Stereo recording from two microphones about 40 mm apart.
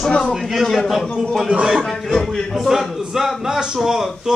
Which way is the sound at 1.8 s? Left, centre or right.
Centre.